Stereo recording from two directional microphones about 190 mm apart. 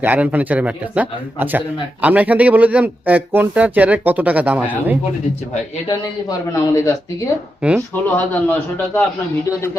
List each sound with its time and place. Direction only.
0.0 s a man's voice: 10° right (ahead or behind)
6.5 s speech: 15° left (ahead or behind)
7.6 s a man's voice: 5° right (ahead or behind)
8.0 s speech: 10° left (ahead or behind)